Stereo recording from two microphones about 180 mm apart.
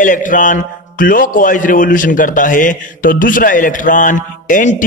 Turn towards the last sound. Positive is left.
turn(degrees=45)  # may be behind; listen again after turning